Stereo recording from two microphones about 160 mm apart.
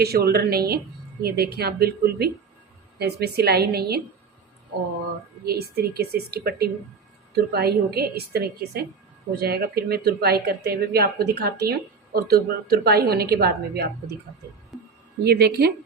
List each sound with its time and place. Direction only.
0.0 s a woman's voice: 75° right (ahead or behind)
5.5 s a woman's voice: 80° right
9.3 s speech: 75° right (ahead or behind)
15.2 s a woman's voice: 80° right